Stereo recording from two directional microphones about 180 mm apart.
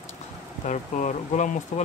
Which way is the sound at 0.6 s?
40° left (ahead or behind).